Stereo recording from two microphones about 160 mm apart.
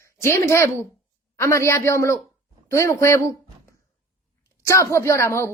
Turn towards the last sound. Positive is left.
turn(degrees=15)  # may be behind; listen again after turning